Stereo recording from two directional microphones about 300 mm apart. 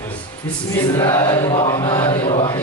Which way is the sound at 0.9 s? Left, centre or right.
Centre.